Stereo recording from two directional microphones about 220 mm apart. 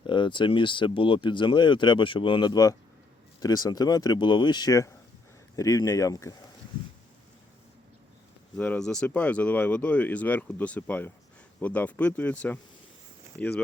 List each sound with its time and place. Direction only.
0.0 s speech: 20° left (ahead or behind)
8.5 s speech: 5° left (ahead or behind)
13.3 s speech: 10° right (ahead or behind)